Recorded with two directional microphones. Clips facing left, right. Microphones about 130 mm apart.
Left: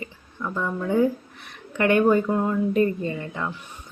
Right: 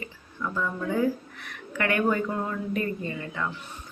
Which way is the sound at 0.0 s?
20° left (ahead or behind).